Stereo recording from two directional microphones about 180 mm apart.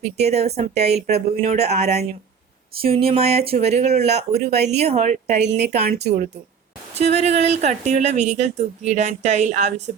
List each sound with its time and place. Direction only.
0.2 s speech: 35° right (ahead or behind)
5.8 s speech: 60° right (ahead or behind)
6.9 s speech: 35° right (ahead or behind)